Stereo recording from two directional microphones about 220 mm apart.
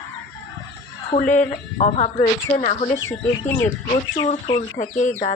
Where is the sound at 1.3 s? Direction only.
30° left (ahead or behind).